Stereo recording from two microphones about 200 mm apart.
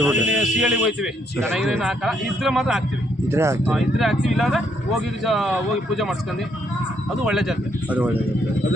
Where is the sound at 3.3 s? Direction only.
15° right (ahead or behind).